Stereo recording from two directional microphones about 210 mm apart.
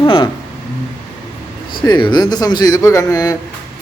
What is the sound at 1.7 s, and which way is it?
A man's voice, 20° left (ahead or behind).